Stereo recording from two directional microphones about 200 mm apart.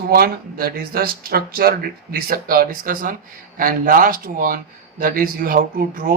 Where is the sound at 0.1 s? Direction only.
50° right (ahead or behind).